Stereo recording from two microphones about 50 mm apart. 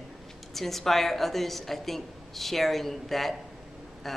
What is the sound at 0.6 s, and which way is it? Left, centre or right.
Speech, centre.